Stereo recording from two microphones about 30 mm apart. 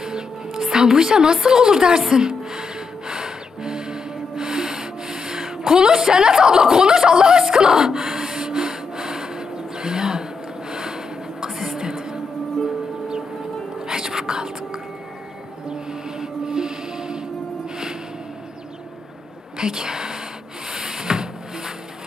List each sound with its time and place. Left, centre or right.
0.0 s music: right
7.4 s gasp: right
10.7 s a sound: right
11.8 s music: right
13.7 s whispering: right
15.7 s music: right
19.6 s a sound: right